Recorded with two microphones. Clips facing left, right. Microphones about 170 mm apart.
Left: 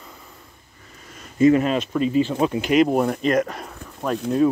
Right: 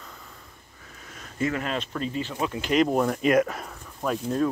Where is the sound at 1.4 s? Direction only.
20° left (ahead or behind).